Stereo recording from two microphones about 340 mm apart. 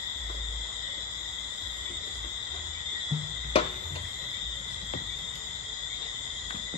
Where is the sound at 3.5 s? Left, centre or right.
Centre.